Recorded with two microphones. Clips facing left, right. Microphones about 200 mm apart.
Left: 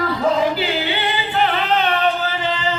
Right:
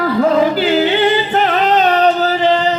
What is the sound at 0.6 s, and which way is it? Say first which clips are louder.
Singing: right 9 dB; 45° right (ahead or behind).